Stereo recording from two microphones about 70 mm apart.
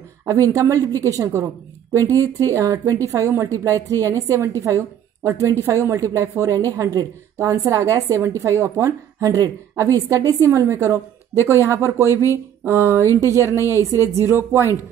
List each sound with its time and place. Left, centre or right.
0.3 s a woman's voice: right
7.4 s a woman's voice: right
13.0 s a sound: left
13.3 s speech: right